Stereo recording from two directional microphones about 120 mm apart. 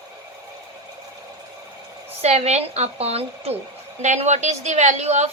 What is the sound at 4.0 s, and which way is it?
A woman's voice, 75° right (ahead or behind).